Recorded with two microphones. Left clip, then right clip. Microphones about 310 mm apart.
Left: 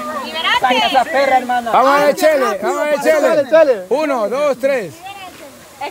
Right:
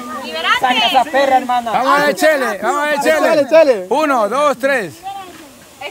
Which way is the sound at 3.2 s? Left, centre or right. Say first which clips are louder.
Right 2 dB; right.